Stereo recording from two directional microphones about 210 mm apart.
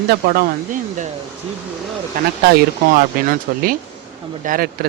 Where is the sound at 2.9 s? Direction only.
40° right (ahead or behind).